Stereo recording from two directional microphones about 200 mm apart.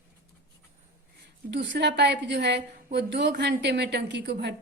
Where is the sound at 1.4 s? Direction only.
60° right (ahead or behind).